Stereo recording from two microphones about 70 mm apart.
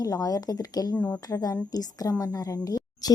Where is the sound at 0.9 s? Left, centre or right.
Centre.